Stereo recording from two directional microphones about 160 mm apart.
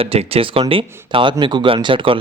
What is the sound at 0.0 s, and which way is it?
Speech, 35° right (ahead or behind).